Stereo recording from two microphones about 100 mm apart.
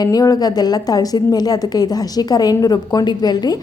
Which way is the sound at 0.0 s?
40° left (ahead or behind).